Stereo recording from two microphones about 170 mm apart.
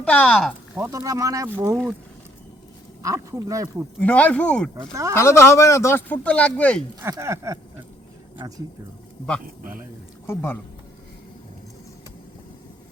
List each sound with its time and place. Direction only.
0.0 s speech: 5° left (ahead or behind)
0.8 s speech: 20° right (ahead or behind)
3.0 s speech: 20° right (ahead or behind)
4.0 s speech: 10° left (ahead or behind)
5.1 s speech: 15° left (ahead or behind)
7.0 s speech: 15° right (ahead or behind)
10.2 s speech: 15° left (ahead or behind)